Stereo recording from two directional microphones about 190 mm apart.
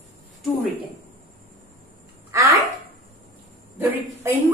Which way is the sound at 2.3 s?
15° right (ahead or behind).